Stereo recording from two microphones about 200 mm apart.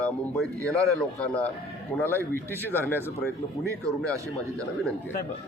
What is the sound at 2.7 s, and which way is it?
Speech, 10° left (ahead or behind).